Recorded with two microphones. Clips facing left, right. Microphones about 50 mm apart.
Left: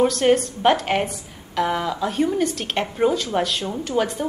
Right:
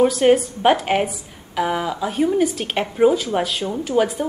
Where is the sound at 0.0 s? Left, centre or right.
Centre.